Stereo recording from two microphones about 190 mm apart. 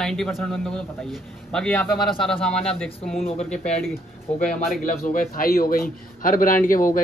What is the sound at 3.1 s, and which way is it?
A man's voice, 30° left (ahead or behind).